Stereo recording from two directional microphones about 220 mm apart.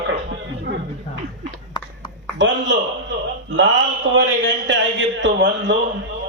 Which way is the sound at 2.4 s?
55° right (ahead or behind).